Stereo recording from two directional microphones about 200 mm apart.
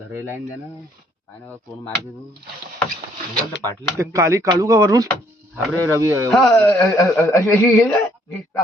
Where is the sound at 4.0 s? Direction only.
15° right (ahead or behind).